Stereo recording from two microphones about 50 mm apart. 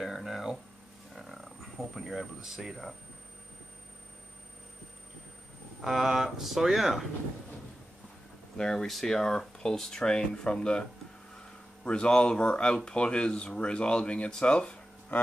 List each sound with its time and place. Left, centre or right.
0.0 s a sound: centre
1.1 s frog: centre
2.4 s speech: centre
5.8 s speech: centre
8.5 s speech: centre